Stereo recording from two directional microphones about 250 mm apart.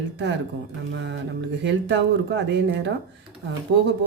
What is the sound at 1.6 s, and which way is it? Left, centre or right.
Speech, right.